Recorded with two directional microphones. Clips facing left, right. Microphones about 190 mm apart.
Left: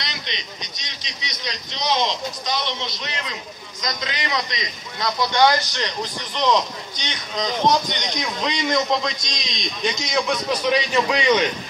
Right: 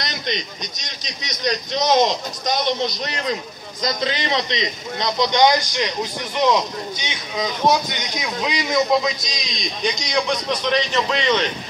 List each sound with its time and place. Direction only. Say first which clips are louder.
0.0 s a man's voice: right 7 dB; 45° right (ahead or behind)
3.8 s a man's voice: right 5 dB; 30° right (ahead or behind); by 11.4 s 10° left (ahead or behind)